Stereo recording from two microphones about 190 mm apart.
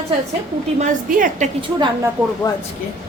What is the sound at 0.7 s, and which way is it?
Speech, 45° right (ahead or behind).